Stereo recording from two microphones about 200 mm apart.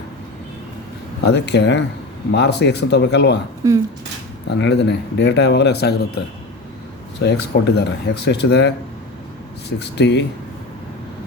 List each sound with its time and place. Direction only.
1.2 s speech: 55° left (ahead or behind)
3.6 s speech: 15° right (ahead or behind)
4.4 s speech: 60° left (ahead or behind)
7.2 s speech: 55° left (ahead or behind)